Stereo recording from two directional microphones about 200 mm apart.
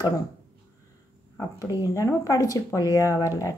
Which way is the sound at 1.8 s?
15° left (ahead or behind).